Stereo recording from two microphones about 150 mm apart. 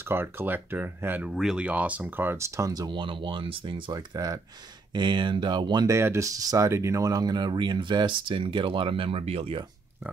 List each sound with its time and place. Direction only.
0.0 s speech: 15° right (ahead or behind); by 9.7 s 40° right (ahead or behind)